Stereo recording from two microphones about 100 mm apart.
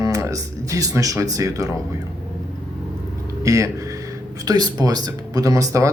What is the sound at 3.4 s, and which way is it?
Speech, 35° right (ahead or behind).